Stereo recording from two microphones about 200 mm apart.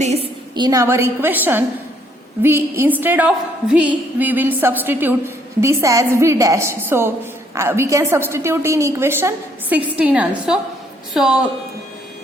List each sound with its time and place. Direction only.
0.0 s a woman's voice: 30° right (ahead or behind); by 11.3 s centre (ahead or behind)